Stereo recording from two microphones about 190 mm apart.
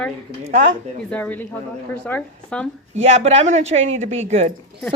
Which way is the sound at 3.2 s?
35° right (ahead or behind).